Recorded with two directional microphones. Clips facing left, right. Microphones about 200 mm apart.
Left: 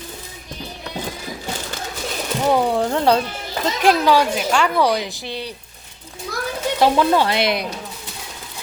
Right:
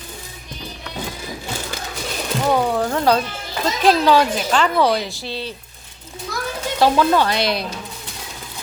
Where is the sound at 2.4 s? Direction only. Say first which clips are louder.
Left 1 dB; 15° left (ahead or behind).